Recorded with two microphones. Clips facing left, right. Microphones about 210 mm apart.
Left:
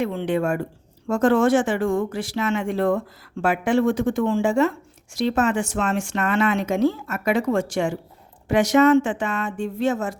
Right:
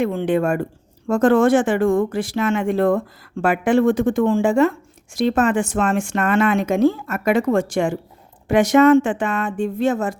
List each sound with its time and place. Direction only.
0.0 s speech: 50° right (ahead or behind)